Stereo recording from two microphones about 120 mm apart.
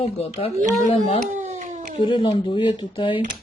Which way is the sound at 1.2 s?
75° right (ahead or behind).